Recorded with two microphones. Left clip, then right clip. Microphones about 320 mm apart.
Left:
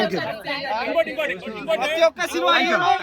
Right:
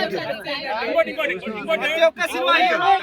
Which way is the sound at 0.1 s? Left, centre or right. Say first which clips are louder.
Even; left.